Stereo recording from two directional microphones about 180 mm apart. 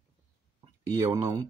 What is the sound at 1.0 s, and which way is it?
Speech, 20° right (ahead or behind).